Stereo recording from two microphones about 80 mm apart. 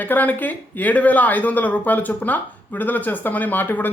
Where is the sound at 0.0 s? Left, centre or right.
Left.